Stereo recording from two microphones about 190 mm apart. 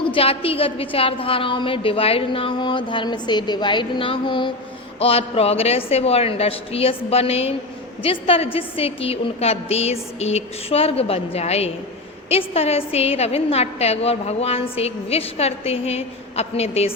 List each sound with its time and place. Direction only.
0.0 s a woman's voice: 30° left (ahead or behind)